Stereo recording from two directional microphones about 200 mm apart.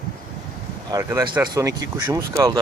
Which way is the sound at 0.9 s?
15° right (ahead or behind).